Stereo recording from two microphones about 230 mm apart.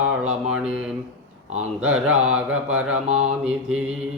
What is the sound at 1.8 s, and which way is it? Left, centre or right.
Mantra, right.